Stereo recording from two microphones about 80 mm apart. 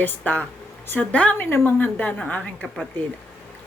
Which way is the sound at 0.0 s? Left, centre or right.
Left.